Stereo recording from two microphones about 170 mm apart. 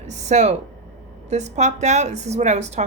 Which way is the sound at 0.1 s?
40° right (ahead or behind).